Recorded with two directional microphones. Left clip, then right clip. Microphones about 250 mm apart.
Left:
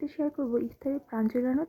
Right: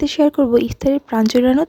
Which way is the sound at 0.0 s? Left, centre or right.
Right.